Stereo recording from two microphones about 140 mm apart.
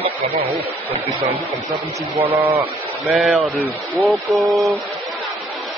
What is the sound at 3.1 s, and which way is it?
Speech, 5° right (ahead or behind).